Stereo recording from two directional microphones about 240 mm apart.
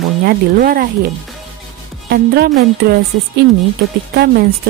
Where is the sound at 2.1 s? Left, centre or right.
Right.